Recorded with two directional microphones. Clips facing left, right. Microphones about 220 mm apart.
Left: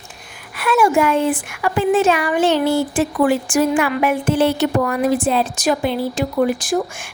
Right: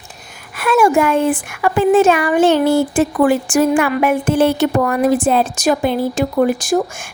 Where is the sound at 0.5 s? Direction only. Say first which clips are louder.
Right 3 dB; 50° right (ahead or behind).